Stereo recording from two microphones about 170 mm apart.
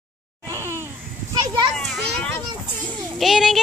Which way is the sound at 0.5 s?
15° right (ahead or behind).